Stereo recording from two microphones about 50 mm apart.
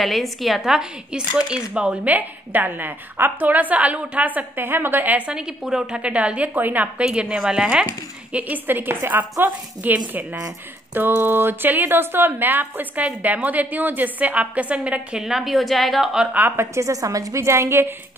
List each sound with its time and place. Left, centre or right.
0.0 s a woman's voice: centre
0.6 s speech: centre
2.0 s a woman's voice: right
5.6 s a woman's voice: centre; by 7.1 s right
7.2 s speech: centre
8.3 s a woman's voice: right
8.6 s speech: right
11.0 s a woman's voice: right
15.1 s a woman's voice: centre
16.5 s a woman's voice: right